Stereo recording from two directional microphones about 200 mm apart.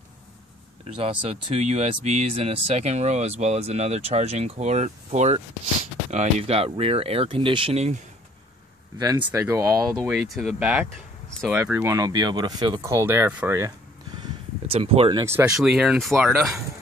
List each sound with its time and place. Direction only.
0.8 s speech: 30° right (ahead or behind)
8.9 s speech: 20° right (ahead or behind)
10.1 s speech: centre (ahead or behind)
11.8 s speech: 15° right (ahead or behind)
14.2 s speech: 30° right (ahead or behind); by 16.6 s centre (ahead or behind)